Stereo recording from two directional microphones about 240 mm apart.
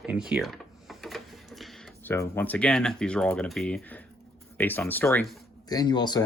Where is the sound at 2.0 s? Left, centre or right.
Centre.